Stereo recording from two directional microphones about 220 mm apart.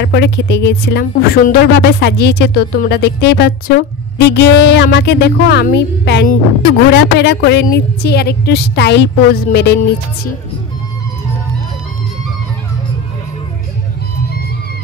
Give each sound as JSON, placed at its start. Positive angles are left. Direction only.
{"t": 0.0, "sound": "speech", "side_deg": 50}